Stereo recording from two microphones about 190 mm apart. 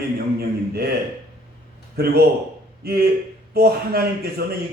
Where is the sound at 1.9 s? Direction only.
55° right (ahead or behind).